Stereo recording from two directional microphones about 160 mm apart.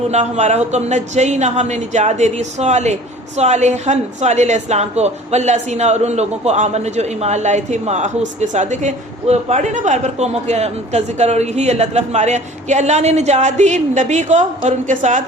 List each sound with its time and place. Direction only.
0.1 s speech: 45° right (ahead or behind)